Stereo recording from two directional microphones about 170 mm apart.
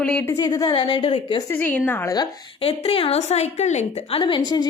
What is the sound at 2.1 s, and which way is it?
A woman's voice, 35° left (ahead or behind).